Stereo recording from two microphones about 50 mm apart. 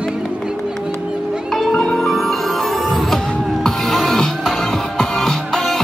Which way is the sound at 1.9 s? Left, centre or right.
Centre.